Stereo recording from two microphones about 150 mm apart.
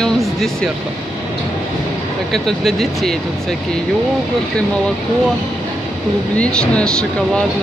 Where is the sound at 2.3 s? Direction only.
Centre (ahead or behind).